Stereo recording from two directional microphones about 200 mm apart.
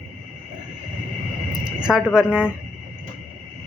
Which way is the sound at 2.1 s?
5° right (ahead or behind).